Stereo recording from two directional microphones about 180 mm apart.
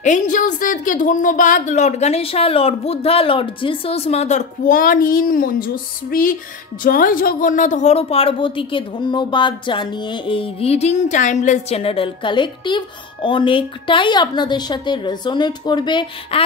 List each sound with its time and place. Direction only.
0.0 s a woman's voice: 45° left (ahead or behind); by 16.4 s 30° left (ahead or behind)